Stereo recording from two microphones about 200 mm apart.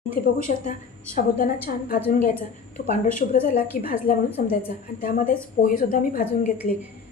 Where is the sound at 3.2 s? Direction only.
45° left (ahead or behind).